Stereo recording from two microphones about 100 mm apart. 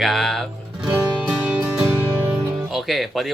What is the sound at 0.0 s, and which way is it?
Speech, centre (ahead or behind).